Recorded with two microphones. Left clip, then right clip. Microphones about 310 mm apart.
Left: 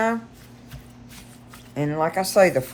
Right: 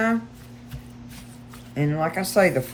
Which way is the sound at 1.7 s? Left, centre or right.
Centre.